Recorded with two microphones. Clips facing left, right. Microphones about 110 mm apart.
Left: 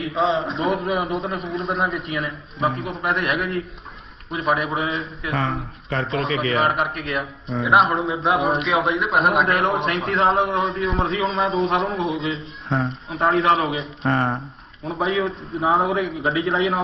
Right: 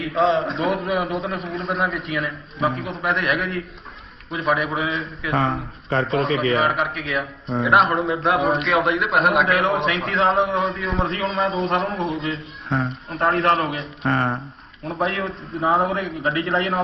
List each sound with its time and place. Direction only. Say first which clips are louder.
0.0 s a man's voice: right 2 dB; centre (ahead or behind)
5.9 s speech: right 3 dB; 35° right (ahead or behind)
6.6 s a man's voice: even; centre (ahead or behind)
14.0 s speech: even; 55° right (ahead or behind)
14.8 s a man's voice: left 2 dB; centre (ahead or behind)